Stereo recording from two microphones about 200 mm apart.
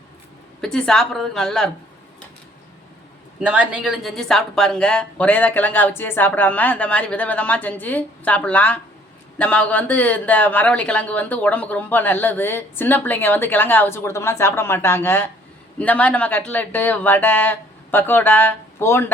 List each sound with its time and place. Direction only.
0.6 s a woman's voice: 5° left (ahead or behind)
3.4 s speech: 5° right (ahead or behind); by 19.1 s 10° left (ahead or behind)